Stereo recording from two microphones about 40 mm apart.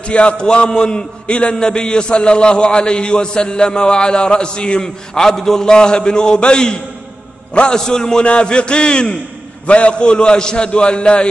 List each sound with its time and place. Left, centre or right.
0.0 s a man's voice: left